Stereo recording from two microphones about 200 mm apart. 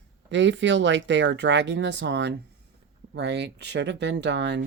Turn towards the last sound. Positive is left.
turn(degrees=-60)  # may be behind; listen again after turning